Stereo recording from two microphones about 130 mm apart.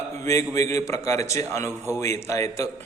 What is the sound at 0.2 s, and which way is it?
A man's voice, 25° left (ahead or behind).